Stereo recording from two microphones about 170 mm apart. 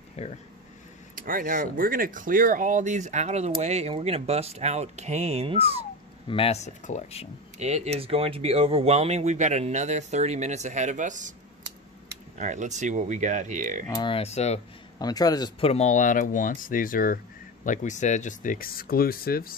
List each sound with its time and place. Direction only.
0.2 s speech: 35° left (ahead or behind)
1.1 s speech: 55° right (ahead or behind); by 5.7 s 35° right (ahead or behind)
6.2 s speech: 35° left (ahead or behind)
7.5 s speech: 40° right (ahead or behind)
12.4 s speech: 45° right (ahead or behind)
13.8 s speech: 25° left (ahead or behind)
15.0 s a man's voice: 20° left (ahead or behind)
15.7 s speech: 45° left (ahead or behind); by 19.5 s 60° left (ahead or behind)